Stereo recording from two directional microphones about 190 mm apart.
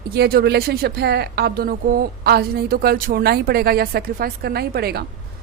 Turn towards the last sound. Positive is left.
turn(degrees=-55)  # may be behind; listen again after turning